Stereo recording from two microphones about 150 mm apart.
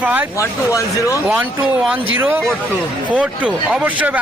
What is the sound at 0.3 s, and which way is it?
Speech, 20° left (ahead or behind).